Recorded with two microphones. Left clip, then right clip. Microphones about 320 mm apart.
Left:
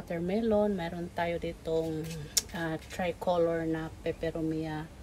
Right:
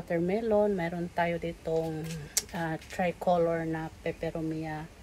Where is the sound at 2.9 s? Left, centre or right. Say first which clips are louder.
Right 3 dB; right.